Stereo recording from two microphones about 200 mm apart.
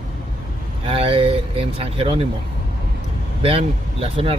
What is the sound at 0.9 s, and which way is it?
Speech, 30° right (ahead or behind).